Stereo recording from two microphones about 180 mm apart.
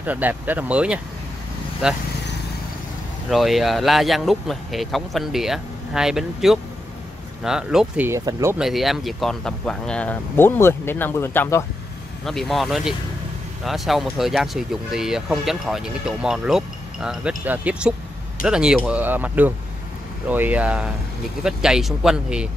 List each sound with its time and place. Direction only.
0.0 s speech: 10° right (ahead or behind)
3.3 s speech: centre (ahead or behind); by 8.5 s 15° right (ahead or behind)
8.5 s speech: centre (ahead or behind)
12.3 s speech: centre (ahead or behind)